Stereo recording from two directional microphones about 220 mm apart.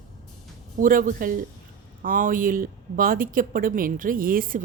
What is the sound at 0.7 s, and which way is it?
Speech, 40° right (ahead or behind).